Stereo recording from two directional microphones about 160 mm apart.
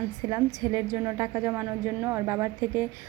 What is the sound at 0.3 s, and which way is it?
A woman's voice, 20° right (ahead or behind).